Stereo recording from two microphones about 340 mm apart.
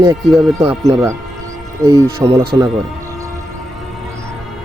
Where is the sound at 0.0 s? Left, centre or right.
Centre.